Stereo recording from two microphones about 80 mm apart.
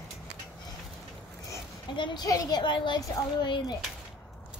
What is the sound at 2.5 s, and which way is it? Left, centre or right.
A child's voice, left.